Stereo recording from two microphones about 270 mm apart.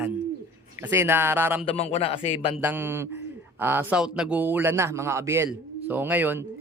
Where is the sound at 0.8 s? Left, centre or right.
Centre.